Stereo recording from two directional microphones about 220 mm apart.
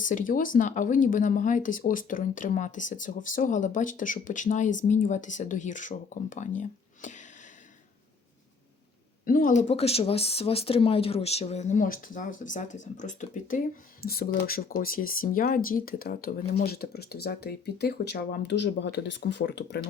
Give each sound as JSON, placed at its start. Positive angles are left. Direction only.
{"t": 0.0, "sound": "speech", "side_deg": 35}
{"t": 9.2, "sound": "speech", "side_deg": 40}